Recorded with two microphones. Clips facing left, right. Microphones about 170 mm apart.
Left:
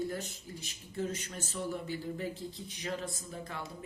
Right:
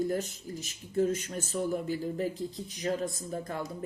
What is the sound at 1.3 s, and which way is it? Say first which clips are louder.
Speech: right 6 dB; 45° right (ahead or behind).